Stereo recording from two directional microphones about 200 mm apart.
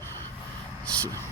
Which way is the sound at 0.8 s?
5° left (ahead or behind).